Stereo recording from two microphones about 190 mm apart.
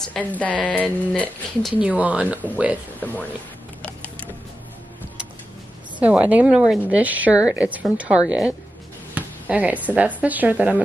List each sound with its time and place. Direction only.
0.0 s speech: 5° left (ahead or behind)
1.8 s a woman's voice: 5° right (ahead or behind)
3.0 s speech: 10° left (ahead or behind)
3.8 s a sound: 5° left (ahead or behind)
5.9 s a woman's voice: 10° right (ahead or behind)
9.1 s music: 10° right (ahead or behind)
9.9 s a woman's voice: 10° right (ahead or behind)